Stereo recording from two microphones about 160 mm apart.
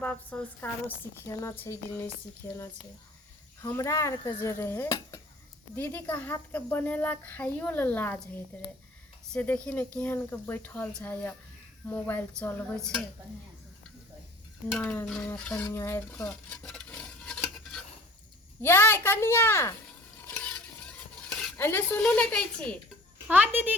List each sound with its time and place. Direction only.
0.0 s a woman's voice: 10° left (ahead or behind)
9.3 s a woman's voice: 10° left (ahead or behind)
14.7 s a woman's voice: 10° left (ahead or behind)
15.6 s stir: 15° left (ahead or behind)
18.6 s a woman's voice: 15° left (ahead or behind)
20.4 s stir: 5° left (ahead or behind)
23.3 s a child's voice: 10° right (ahead or behind)